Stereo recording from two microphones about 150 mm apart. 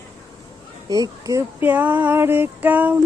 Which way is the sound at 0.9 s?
25° right (ahead or behind).